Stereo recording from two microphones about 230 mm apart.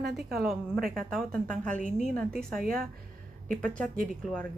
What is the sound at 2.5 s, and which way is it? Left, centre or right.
Speech, right.